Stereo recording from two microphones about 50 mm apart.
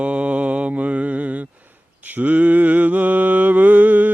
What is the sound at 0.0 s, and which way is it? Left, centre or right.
Mantra, right.